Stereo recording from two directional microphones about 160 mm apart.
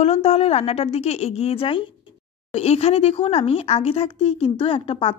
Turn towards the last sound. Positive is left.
turn(degrees=35)  # may be behind; listen again after turning